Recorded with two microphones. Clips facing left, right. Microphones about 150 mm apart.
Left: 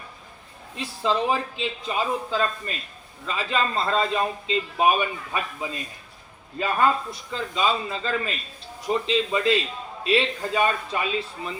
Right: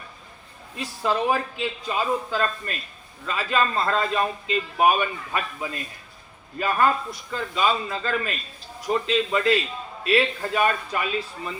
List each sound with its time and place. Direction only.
0.8 s a man's voice: 25° left (ahead or behind)